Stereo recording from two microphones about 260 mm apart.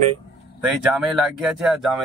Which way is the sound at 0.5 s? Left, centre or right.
Centre.